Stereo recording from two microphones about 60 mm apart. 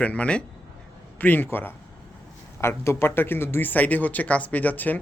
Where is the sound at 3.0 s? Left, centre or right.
Left.